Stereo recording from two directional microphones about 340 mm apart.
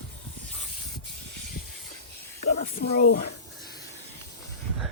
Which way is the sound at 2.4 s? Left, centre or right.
Left.